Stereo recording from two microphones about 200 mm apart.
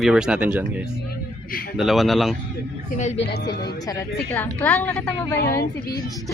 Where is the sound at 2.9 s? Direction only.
35° left (ahead or behind).